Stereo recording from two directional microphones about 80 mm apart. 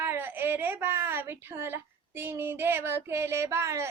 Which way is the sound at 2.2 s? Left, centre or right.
Right.